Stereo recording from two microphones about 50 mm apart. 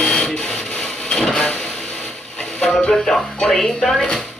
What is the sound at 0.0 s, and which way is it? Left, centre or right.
Printer, centre.